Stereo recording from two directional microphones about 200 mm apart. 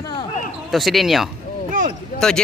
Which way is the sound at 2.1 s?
45° left (ahead or behind).